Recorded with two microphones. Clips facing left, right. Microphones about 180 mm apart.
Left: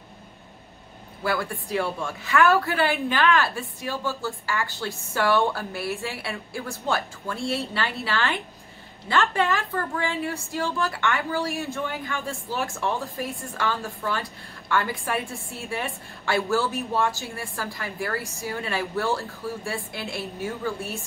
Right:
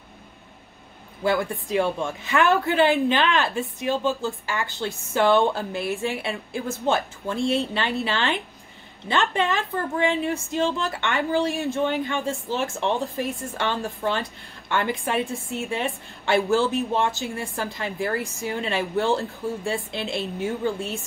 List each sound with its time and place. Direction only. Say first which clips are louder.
1.2 s a woman's voice: right 4 dB; 20° right (ahead or behind)